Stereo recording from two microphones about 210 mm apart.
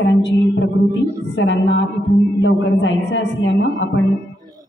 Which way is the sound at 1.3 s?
60° left (ahead or behind).